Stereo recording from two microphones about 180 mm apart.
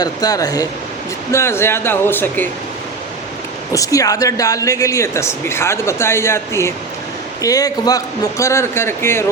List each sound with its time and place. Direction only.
0.0 s speech: 20° left (ahead or behind)
3.7 s speech: 20° left (ahead or behind)